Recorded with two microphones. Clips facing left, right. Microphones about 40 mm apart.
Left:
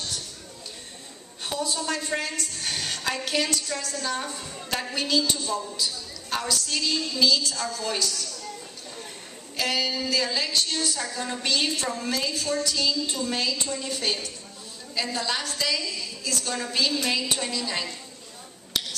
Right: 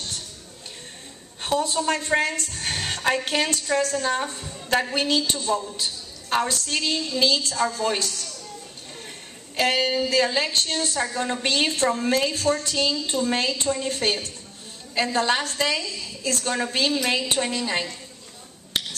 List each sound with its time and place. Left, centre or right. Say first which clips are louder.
1.4 s a woman's voice: right 6 dB; right
9.6 s a woman's voice: right 5 dB; right
16.5 s a woman's voice: right 2 dB; right